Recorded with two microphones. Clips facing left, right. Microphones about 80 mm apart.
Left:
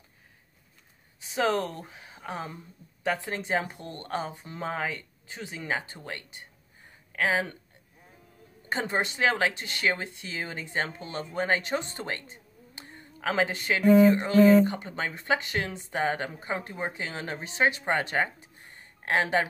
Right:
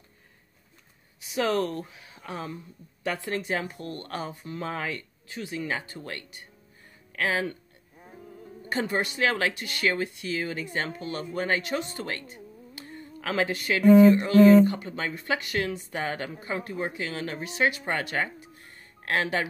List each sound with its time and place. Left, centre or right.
1.2 s speech: left
8.6 s speech: left